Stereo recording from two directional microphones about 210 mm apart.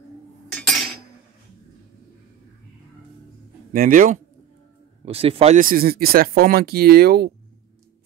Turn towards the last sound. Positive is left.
turn(degrees=-50)  # may be behind; listen again after turning